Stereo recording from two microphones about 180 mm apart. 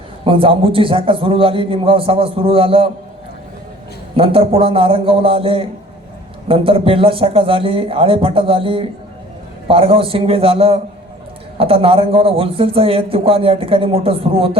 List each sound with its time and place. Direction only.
0.3 s a man's voice: 30° right (ahead or behind)
4.2 s a man's voice: 30° right (ahead or behind)